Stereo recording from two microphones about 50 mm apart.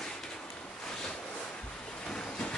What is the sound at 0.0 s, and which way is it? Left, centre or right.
Ocean, centre.